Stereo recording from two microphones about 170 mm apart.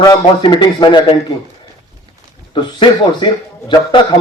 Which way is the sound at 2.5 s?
25° left (ahead or behind).